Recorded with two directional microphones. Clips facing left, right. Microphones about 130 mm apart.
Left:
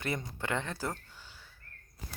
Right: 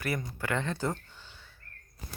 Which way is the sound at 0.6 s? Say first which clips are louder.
Right 5 dB; 5° left (ahead or behind).